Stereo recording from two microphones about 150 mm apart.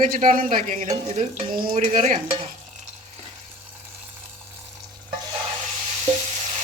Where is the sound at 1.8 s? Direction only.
55° right (ahead or behind).